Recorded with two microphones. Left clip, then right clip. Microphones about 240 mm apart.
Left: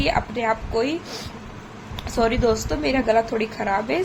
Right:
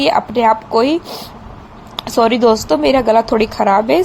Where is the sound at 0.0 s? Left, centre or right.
Right.